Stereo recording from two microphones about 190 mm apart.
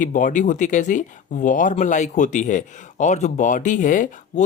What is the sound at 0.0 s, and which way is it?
Speech, 45° left (ahead or behind).